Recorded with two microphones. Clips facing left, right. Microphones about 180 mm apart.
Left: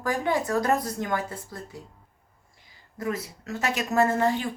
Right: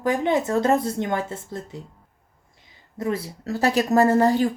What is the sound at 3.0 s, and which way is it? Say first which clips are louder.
A woman's voice: right 4 dB; 30° right (ahead or behind).